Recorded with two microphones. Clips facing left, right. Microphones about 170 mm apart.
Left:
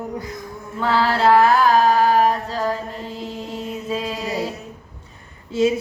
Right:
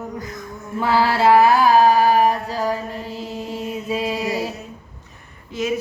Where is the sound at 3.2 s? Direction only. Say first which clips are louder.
Right 1 dB; 10° right (ahead or behind).